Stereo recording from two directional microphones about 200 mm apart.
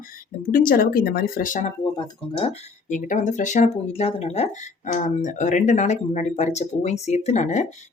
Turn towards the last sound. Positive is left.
turn(degrees=35)  # may be behind; listen again after turning